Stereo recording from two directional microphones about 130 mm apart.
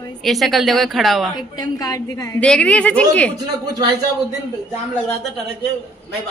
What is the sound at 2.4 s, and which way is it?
Speech, 10° left (ahead or behind).